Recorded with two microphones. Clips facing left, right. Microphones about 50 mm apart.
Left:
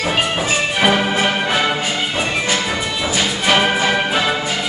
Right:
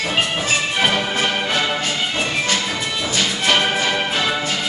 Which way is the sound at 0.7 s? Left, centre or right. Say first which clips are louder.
Left 6 dB; centre.